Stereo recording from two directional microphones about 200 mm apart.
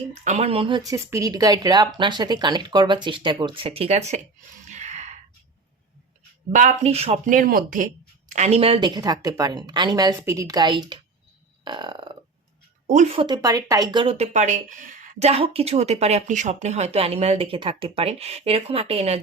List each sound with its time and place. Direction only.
0.1 s a woman's voice: 35° right (ahead or behind)
4.6 s gasp: 35° right (ahead or behind)
6.5 s a woman's voice: 40° right (ahead or behind); by 11.0 s 25° right (ahead or behind)
11.6 s burping: 25° right (ahead or behind)
12.9 s speech: 35° right (ahead or behind)